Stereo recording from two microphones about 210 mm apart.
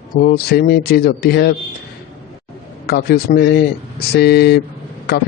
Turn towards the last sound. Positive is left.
turn(degrees=50)  # may be behind; listen again after turning